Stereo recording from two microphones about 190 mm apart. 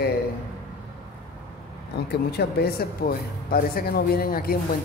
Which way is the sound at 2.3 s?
55° left (ahead or behind).